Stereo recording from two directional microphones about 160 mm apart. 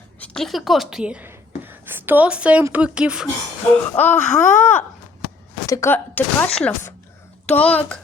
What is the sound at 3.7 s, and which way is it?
Speech, 10° left (ahead or behind).